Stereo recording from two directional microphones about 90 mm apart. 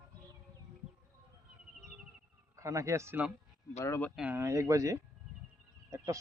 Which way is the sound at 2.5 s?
35° right (ahead or behind).